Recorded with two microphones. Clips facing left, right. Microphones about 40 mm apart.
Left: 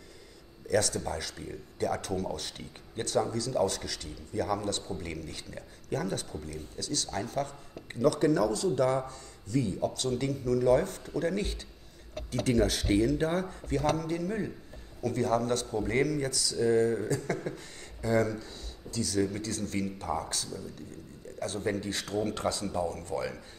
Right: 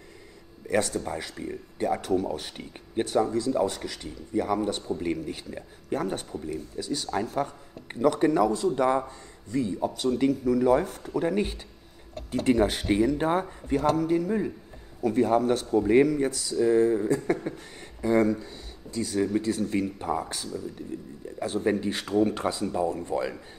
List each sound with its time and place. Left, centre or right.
0.7 s speech: right